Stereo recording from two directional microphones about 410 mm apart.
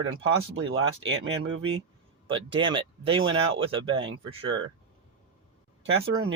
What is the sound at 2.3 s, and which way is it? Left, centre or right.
Speech, centre.